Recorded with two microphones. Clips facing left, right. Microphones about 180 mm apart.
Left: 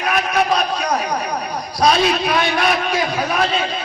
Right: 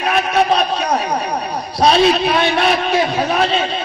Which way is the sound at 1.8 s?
30° right (ahead or behind).